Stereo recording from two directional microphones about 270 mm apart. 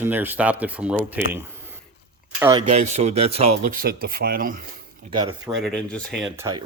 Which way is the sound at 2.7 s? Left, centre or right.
Right.